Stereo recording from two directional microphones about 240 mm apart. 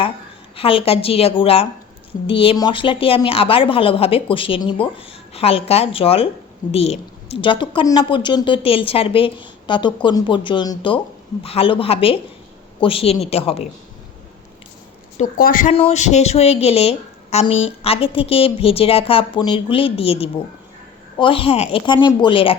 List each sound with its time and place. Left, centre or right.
0.5 s a woman's voice: left
15.2 s a woman's voice: left